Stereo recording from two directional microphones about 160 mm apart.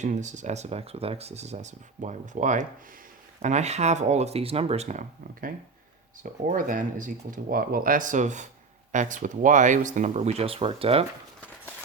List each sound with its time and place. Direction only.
0.0 s speech: 50° right (ahead or behind)
6.5 s speech: 55° right (ahead or behind); by 11.0 s 40° right (ahead or behind)